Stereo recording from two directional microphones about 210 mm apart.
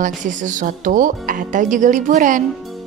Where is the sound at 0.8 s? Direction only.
40° right (ahead or behind).